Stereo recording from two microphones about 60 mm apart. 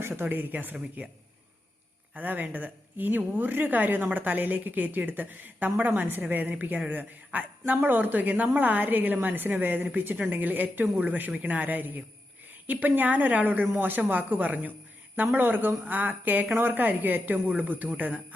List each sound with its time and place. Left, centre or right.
0.2 s speech: right
2.1 s a woman's voice: right